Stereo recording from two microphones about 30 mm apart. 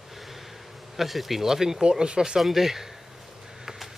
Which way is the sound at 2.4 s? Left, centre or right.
Centre.